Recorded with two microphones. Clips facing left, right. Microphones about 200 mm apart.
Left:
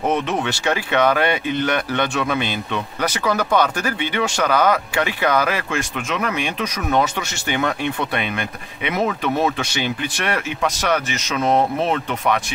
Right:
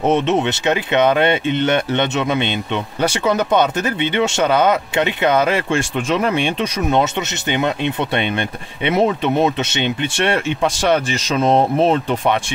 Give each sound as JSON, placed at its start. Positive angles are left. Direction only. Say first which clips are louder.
{"t": 0.0, "sound": "speech", "louder": "right 5 dB", "side_deg": -25}